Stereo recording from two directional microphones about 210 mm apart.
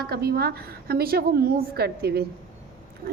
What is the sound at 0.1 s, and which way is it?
A woman's voice, 50° right (ahead or behind).